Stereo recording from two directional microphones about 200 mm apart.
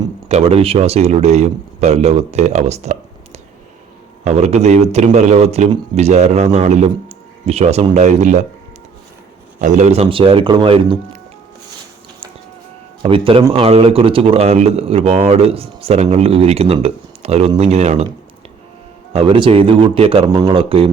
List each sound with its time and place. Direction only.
0.3 s a man's voice: 30° right (ahead or behind)
4.2 s a man's voice: 35° right (ahead or behind)
9.6 s speech: 40° right (ahead or behind)
13.0 s a man's voice: 25° right (ahead or behind)
19.1 s speech: 25° right (ahead or behind)